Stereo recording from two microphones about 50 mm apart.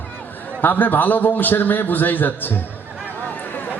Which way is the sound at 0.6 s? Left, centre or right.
Left.